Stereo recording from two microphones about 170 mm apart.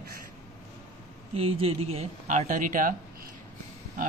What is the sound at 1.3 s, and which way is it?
Speech, 35° right (ahead or behind).